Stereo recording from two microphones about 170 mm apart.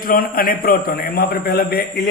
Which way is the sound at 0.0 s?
60° left (ahead or behind).